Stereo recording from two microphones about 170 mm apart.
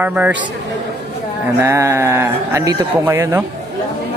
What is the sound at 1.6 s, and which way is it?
Speech, 15° right (ahead or behind).